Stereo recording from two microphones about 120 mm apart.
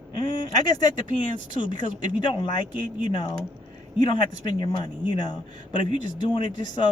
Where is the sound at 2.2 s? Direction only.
40° left (ahead or behind).